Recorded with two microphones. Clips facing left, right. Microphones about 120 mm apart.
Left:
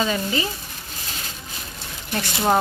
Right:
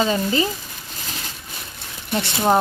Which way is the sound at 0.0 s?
30° right (ahead or behind).